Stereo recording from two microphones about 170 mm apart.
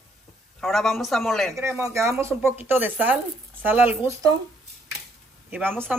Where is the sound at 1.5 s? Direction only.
15° right (ahead or behind).